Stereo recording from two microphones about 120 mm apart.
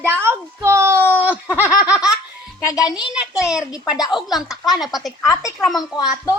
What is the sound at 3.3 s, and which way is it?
Speech, 5° right (ahead or behind).